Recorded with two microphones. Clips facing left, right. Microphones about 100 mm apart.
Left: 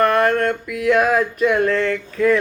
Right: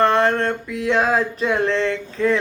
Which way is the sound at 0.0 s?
25° right (ahead or behind).